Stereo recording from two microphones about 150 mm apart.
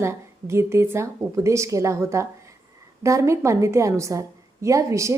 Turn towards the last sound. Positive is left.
turn(degrees=-20)  # may be behind; listen again after turning